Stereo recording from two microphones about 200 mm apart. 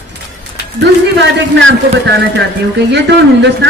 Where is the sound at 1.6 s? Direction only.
65° right (ahead or behind).